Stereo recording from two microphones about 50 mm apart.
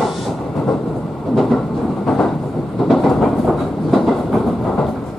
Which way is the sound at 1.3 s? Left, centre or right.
Centre.